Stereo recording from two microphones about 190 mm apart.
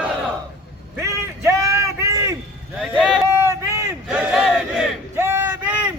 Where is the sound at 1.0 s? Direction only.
15° right (ahead or behind).